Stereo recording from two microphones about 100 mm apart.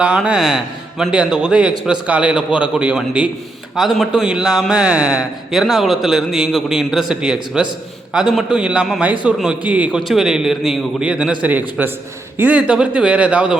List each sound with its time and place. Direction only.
0.3 s speech: 5° right (ahead or behind)